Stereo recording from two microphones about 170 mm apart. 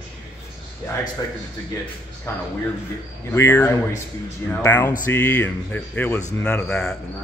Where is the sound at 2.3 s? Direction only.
15° left (ahead or behind).